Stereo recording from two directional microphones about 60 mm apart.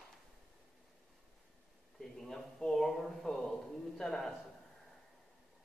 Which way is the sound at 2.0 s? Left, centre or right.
Centre.